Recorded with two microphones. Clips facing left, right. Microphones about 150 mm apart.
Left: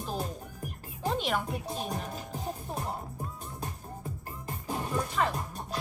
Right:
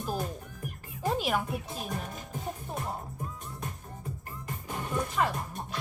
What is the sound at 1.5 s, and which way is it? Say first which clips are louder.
Speech: left 1 dB; 35° left (ahead or behind).